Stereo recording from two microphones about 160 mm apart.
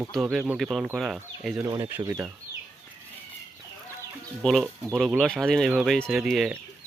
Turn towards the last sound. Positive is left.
turn(degrees=0)  # may be behind; listen again after turning